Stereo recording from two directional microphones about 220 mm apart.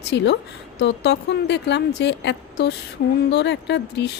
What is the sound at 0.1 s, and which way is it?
A woman's voice, 50° left (ahead or behind).